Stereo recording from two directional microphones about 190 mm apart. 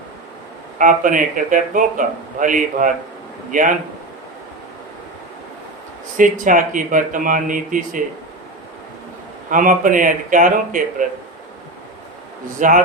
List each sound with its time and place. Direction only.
0.8 s speech: 45° right (ahead or behind)
6.1 s speech: 45° right (ahead or behind)
9.5 s speech: 45° right (ahead or behind)
12.5 s speech: 45° right (ahead or behind)